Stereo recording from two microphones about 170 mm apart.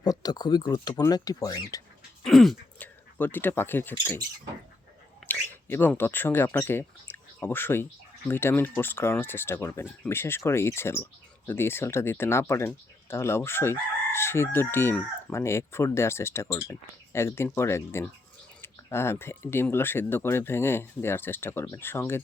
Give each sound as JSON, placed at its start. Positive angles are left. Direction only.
{"t": 0.0, "sound": "speech", "side_deg": 25}
{"t": 2.2, "sound": "speech", "side_deg": 0}
{"t": 5.2, "sound": "speech", "side_deg": 15}